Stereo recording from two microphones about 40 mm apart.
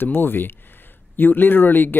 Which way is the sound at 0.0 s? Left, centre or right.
Left.